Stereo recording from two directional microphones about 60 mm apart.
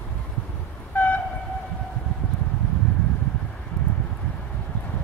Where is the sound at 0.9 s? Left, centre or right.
Left.